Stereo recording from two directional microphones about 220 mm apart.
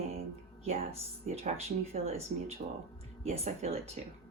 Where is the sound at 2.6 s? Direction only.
45° right (ahead or behind).